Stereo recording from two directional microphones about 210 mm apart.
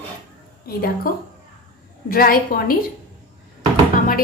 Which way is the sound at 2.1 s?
45° left (ahead or behind).